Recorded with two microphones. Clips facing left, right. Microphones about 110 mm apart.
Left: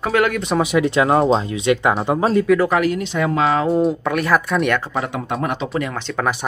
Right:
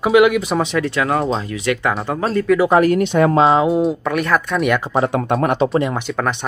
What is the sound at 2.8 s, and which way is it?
Speech, 55° right (ahead or behind).